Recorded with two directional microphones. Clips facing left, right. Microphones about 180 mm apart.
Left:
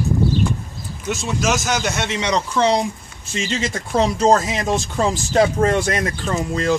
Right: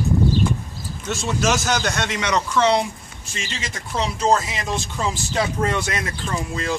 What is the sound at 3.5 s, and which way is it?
Speech, 45° left (ahead or behind).